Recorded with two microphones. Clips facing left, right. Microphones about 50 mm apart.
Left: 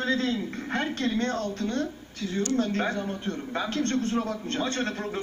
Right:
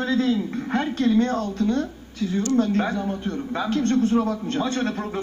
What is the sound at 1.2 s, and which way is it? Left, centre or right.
Speech, centre.